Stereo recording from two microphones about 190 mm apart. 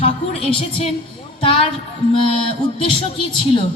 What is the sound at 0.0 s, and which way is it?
A woman's voice, 30° left (ahead or behind).